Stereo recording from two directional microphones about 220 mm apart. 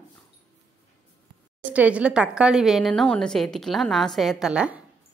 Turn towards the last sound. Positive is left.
turn(degrees=-5)  # may be behind; listen again after turning